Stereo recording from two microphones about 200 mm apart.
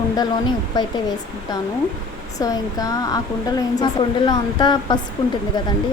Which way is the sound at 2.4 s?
15° left (ahead or behind).